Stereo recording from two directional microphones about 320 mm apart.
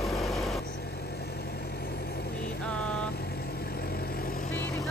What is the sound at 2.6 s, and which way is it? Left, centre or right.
Vehicle, centre.